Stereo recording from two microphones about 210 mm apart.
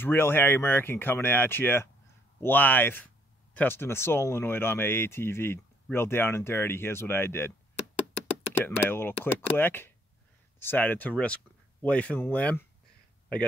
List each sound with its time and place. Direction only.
0.0 s speech: 10° left (ahead or behind)
8.6 s speech: 10° left (ahead or behind)